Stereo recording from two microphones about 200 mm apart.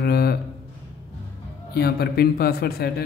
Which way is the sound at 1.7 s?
55° left (ahead or behind).